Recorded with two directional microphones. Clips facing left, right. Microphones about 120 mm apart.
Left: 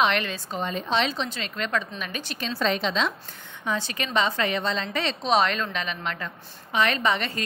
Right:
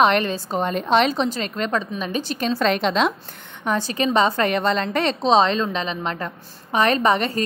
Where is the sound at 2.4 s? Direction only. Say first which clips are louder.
Right 5 dB; 50° right (ahead or behind).